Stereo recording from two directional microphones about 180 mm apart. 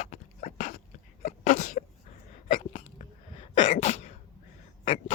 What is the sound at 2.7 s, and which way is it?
Sneeze, 30° left (ahead or behind).